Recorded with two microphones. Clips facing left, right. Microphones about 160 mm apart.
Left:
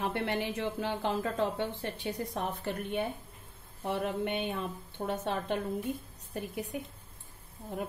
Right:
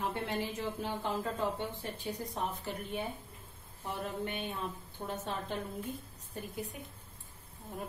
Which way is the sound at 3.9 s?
75° left (ahead or behind).